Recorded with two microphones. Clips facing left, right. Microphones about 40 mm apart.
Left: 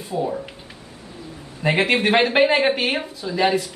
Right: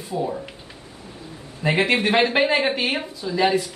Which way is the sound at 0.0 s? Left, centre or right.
Centre.